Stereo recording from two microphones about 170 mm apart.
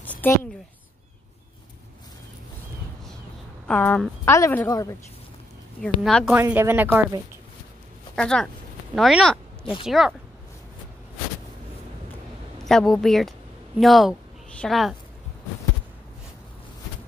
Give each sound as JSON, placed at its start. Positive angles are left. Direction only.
{"t": 0.0, "sound": "a sound", "side_deg": 10}
{"t": 3.6, "sound": "speech", "side_deg": 5}
{"t": 5.8, "sound": "speech", "side_deg": 0}
{"t": 6.3, "sound": "speech", "side_deg": -15}
{"t": 8.2, "sound": "speech", "side_deg": 5}
{"t": 12.6, "sound": "speech", "side_deg": 5}